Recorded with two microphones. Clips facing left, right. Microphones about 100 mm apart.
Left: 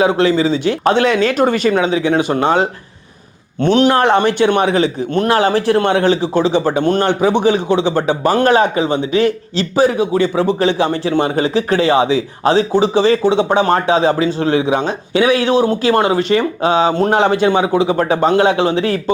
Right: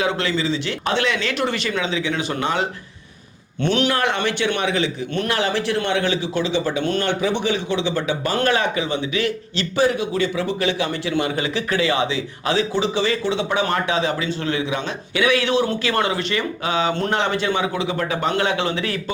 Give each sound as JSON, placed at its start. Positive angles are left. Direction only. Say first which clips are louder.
{"t": 0.2, "sound": "a man's voice", "louder": "left 9 dB", "side_deg": 40}
{"t": 8.8, "sound": "a man's voice", "louder": "left 7 dB", "side_deg": 50}
{"t": 9.1, "sound": "a man's voice", "louder": "left 8 dB", "side_deg": 35}
{"t": 17.7, "sound": "a man's voice", "louder": "left 9 dB", "side_deg": 30}